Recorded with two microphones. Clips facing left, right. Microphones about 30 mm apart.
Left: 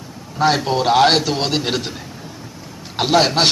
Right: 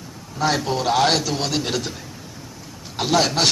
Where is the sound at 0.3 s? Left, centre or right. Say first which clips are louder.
Left 5 dB; left.